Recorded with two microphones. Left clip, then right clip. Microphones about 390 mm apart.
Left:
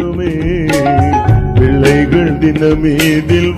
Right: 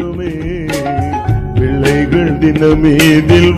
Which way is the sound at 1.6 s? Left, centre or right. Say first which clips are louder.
Left 2 dB; left.